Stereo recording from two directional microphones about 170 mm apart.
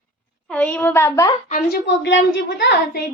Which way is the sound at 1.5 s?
80° left.